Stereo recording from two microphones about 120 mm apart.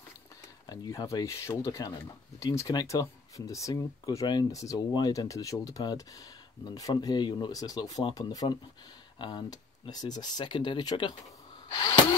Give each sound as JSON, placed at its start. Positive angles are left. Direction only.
{"t": 0.7, "sound": "speech", "side_deg": 30}